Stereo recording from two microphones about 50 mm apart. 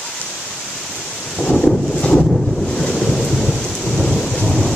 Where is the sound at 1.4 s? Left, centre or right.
Centre.